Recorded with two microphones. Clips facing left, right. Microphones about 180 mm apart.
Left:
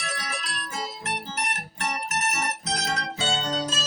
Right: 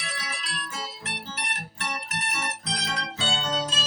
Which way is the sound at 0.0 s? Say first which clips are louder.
Left 3 dB; 45° left (ahead or behind).